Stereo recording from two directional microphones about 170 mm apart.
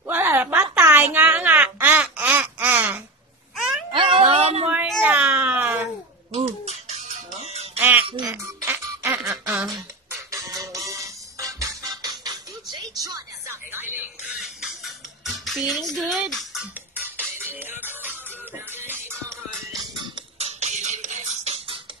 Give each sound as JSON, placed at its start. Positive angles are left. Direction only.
{"t": 0.0, "sound": "a sound", "side_deg": -10}
{"t": 3.9, "sound": "cat", "side_deg": -30}
{"t": 4.6, "sound": "a sound", "side_deg": -10}
{"t": 6.3, "sound": "music", "side_deg": -40}
{"t": 8.3, "sound": "music", "side_deg": -15}
{"t": 13.9, "sound": "a sound", "side_deg": -5}
{"t": 15.2, "sound": "music", "side_deg": 0}
{"t": 17.0, "sound": "music", "side_deg": -10}
{"t": 20.2, "sound": "music", "side_deg": -40}